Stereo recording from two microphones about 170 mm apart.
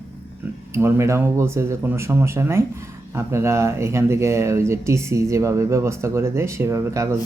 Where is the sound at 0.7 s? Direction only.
15° right (ahead or behind).